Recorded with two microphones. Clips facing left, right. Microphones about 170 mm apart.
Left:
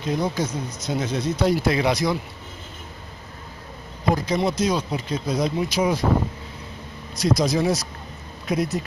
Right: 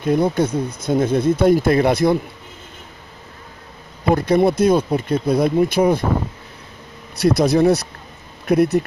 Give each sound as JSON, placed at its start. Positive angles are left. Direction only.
{"t": 0.0, "sound": "speech", "side_deg": -55}
{"t": 4.1, "sound": "speech", "side_deg": -60}
{"t": 7.2, "sound": "speech", "side_deg": -60}